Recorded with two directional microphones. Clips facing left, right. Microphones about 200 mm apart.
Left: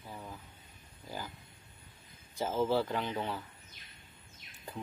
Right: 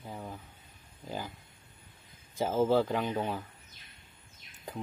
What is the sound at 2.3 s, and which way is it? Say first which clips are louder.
Speech: right 4 dB; 15° right (ahead or behind).